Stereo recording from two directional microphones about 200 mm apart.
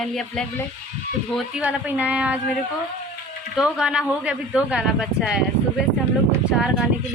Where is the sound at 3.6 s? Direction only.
5° right (ahead or behind).